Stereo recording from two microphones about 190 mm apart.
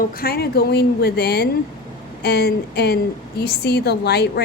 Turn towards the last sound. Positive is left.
turn(degrees=60)  # may be behind; listen again after turning